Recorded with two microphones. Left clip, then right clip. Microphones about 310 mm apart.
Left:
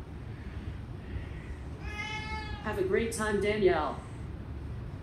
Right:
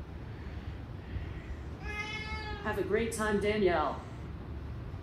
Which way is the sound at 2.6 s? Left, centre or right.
Centre.